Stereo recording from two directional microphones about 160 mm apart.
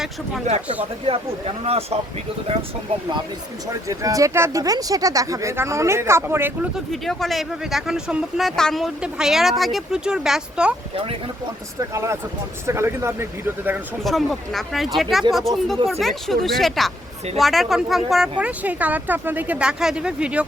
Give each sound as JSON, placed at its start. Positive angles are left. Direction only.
{"t": 0.5, "sound": "speech", "side_deg": -45}
{"t": 1.0, "sound": "speech", "side_deg": -35}
{"t": 3.8, "sound": "speech", "side_deg": -20}
{"t": 6.9, "sound": "speech", "side_deg": 0}
{"t": 11.8, "sound": "speech", "side_deg": -20}
{"t": 14.0, "sound": "speech", "side_deg": 0}